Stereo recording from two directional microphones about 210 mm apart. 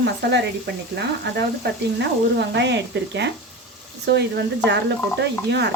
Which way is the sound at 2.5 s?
55° right (ahead or behind).